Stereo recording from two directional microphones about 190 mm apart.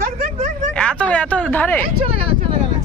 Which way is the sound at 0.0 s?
45° right (ahead or behind).